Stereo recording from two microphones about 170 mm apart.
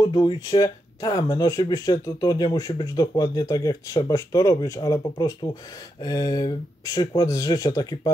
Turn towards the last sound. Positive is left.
turn(degrees=20)  # may be behind; listen again after turning